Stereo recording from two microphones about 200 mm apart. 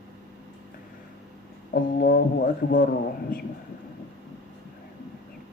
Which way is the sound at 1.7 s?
50° left (ahead or behind).